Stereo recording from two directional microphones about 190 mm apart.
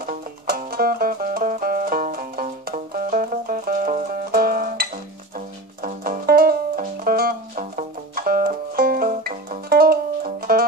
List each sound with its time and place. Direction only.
0.0 s music: 50° right (ahead or behind)